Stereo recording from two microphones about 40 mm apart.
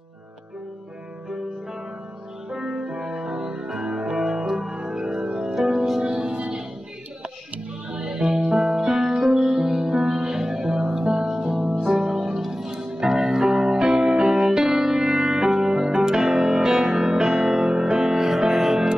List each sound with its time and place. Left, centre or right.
2.5 s music: centre
8.1 s music: centre